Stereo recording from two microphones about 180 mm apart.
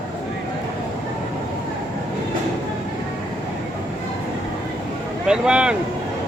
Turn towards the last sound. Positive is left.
turn(degrees=-5)  # may be behind; listen again after turning